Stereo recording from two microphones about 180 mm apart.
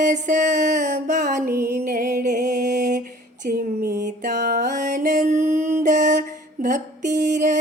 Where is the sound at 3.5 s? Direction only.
55° right (ahead or behind).